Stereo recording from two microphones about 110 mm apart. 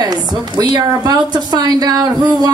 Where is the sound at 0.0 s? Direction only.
35° right (ahead or behind).